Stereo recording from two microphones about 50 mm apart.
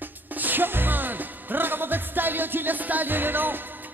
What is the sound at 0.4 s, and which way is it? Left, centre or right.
Music, right.